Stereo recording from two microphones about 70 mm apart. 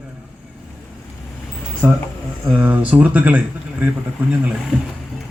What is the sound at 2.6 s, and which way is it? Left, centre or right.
Speech, centre.